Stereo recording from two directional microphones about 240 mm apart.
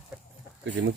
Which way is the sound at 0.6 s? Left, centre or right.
Right.